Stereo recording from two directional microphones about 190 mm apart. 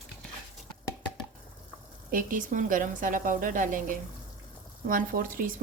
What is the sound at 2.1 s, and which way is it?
A woman's voice, 45° right (ahead or behind).